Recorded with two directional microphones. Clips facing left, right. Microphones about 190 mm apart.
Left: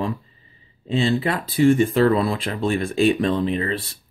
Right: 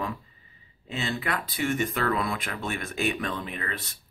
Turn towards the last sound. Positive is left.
turn(degrees=30)  # may be behind; listen again after turning